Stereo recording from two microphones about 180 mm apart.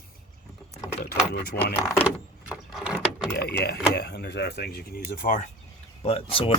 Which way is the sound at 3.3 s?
65° left (ahead or behind).